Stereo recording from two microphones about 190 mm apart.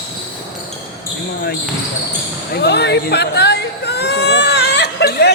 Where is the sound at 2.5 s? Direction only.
60° left (ahead or behind).